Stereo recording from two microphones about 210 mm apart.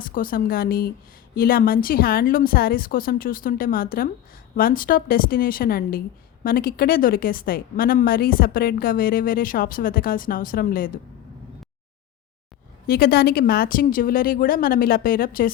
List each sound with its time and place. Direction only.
0.0 s a woman's voice: 40° left (ahead or behind)
12.9 s a woman's voice: 45° left (ahead or behind)